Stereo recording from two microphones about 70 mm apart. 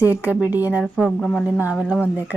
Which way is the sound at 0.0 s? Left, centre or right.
Right.